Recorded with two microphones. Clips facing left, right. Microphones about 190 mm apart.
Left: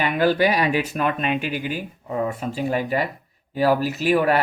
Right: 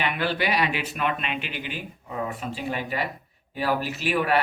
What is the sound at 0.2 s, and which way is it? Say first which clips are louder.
Speech: left 9 dB; 40° left (ahead or behind).